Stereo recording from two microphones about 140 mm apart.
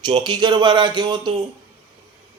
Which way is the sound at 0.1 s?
35° right (ahead or behind).